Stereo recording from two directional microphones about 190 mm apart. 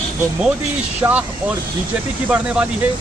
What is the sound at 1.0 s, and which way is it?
Speech, 15° right (ahead or behind).